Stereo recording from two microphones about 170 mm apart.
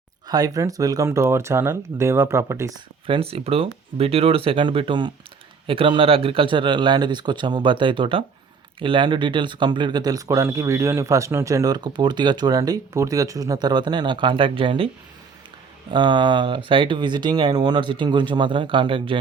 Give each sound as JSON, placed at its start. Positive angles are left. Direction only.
{"t": 0.3, "sound": "speech", "side_deg": -20}
{"t": 15.9, "sound": "speech", "side_deg": -25}